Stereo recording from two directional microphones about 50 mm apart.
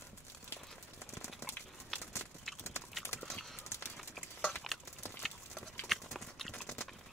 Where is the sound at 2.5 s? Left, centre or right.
Centre.